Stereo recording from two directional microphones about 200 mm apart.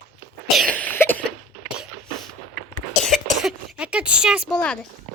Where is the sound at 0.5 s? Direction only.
5° left (ahead or behind).